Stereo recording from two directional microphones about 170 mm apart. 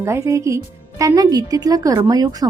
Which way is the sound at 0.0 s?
15° right (ahead or behind).